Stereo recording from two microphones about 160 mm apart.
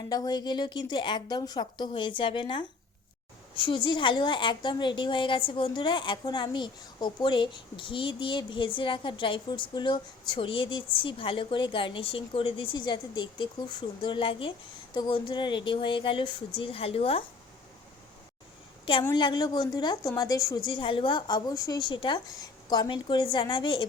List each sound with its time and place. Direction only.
0.1 s a woman's voice: 25° left (ahead or behind)
19.0 s a woman's voice: 25° left (ahead or behind)